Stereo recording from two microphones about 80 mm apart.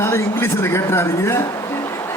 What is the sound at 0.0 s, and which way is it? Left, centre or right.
Speech, left.